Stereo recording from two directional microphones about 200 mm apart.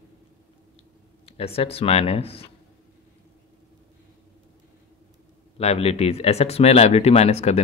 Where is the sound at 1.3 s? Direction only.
30° left (ahead or behind).